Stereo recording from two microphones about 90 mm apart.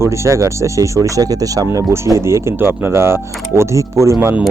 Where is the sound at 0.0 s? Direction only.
30° right (ahead or behind).